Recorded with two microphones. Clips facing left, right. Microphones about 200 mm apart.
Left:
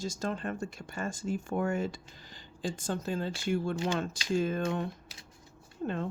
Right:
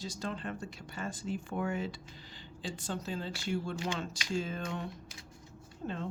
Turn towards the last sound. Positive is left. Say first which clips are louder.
# left 5 dB
turn(degrees=55)  # may be behind; listen again after turning